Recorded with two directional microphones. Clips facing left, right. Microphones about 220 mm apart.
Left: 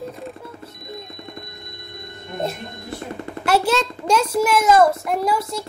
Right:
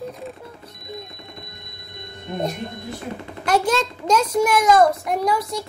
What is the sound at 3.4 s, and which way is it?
A child's voice, 5° left (ahead or behind).